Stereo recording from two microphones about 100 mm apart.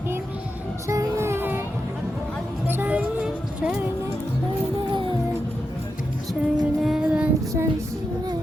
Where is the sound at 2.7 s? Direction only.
20° right (ahead or behind).